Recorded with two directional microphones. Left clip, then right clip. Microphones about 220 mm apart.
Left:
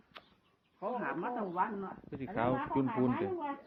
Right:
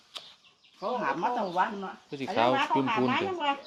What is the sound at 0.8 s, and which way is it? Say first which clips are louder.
Speech: right 8 dB; 65° right (ahead or behind).